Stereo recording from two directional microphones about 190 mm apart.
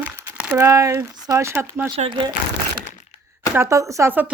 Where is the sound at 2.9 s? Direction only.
40° left (ahead or behind).